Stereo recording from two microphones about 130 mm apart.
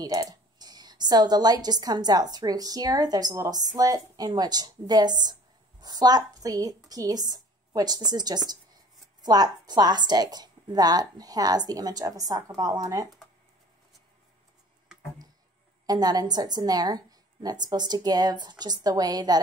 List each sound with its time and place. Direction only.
0.0 s a woman's voice: 25° right (ahead or behind)
15.9 s a woman's voice: 30° right (ahead or behind)